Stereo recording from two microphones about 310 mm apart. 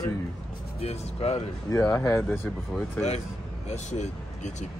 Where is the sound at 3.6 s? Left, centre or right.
Left.